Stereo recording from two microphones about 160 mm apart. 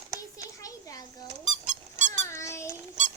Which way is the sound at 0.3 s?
20° left (ahead or behind).